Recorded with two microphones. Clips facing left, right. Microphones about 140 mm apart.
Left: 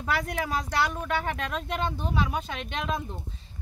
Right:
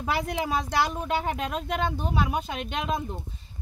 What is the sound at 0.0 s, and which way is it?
Speech, 20° right (ahead or behind).